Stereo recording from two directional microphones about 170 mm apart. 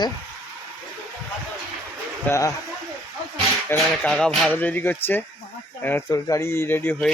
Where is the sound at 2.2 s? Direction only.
15° left (ahead or behind).